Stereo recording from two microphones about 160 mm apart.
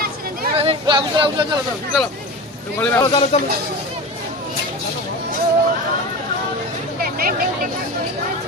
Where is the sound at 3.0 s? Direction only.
30° left (ahead or behind).